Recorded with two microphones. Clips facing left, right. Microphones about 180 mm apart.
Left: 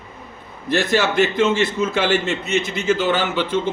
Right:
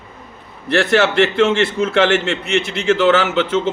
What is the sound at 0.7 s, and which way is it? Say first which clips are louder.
A man's voice: right 4 dB; 70° right (ahead or behind).